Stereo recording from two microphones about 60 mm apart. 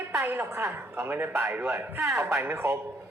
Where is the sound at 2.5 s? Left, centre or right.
Right.